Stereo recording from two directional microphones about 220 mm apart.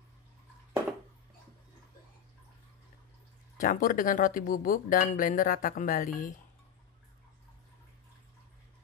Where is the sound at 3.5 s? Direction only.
40° left (ahead or behind).